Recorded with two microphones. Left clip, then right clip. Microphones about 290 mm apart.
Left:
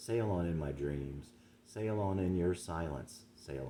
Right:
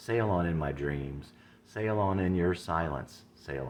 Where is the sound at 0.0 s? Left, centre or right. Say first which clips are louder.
Right 6 dB; centre.